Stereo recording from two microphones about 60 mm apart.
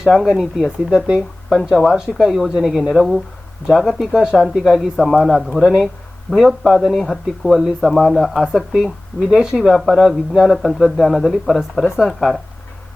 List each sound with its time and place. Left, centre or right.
0.0 s speech: centre
0.9 s speech: centre